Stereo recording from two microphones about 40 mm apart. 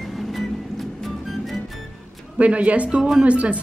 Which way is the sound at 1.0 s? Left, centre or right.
Centre.